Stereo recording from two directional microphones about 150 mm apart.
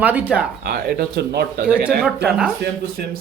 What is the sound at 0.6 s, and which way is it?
Speech, 80° right.